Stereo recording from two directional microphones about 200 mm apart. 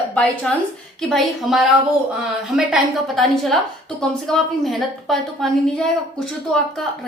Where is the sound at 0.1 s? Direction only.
5° left (ahead or behind).